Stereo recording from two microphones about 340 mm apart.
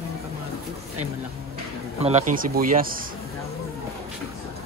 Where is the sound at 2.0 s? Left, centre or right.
Right.